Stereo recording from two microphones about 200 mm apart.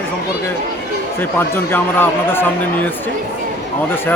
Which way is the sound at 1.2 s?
10° left (ahead or behind).